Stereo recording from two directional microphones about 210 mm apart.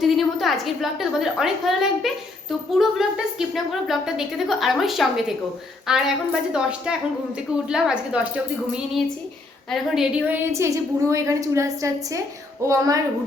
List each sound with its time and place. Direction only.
0.0 s a woman's voice: centre (ahead or behind); by 13.0 s 15° right (ahead or behind)